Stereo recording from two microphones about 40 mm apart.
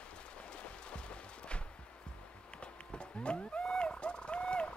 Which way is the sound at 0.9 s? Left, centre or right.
Left.